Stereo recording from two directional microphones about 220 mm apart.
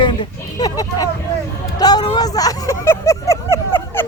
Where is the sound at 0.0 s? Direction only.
20° left (ahead or behind).